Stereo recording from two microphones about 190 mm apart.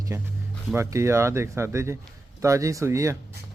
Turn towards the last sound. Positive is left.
turn(degrees=-15)  # may be behind; listen again after turning